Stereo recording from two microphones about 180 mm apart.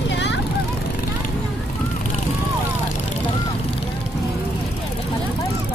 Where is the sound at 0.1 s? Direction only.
75° left (ahead or behind).